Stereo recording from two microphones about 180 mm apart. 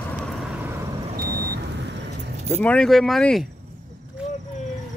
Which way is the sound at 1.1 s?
55° right (ahead or behind).